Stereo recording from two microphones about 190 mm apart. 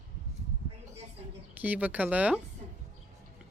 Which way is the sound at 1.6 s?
10° right (ahead or behind).